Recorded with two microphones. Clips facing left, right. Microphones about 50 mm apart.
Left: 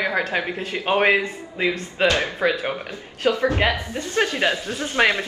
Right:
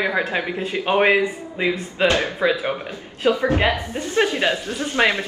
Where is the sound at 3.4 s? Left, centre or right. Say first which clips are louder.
Right 1 dB; right.